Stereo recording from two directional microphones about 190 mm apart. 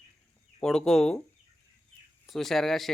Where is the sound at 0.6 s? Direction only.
5° left (ahead or behind).